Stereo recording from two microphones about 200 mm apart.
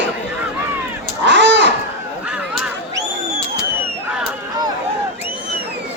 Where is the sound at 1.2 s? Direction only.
65° right (ahead or behind).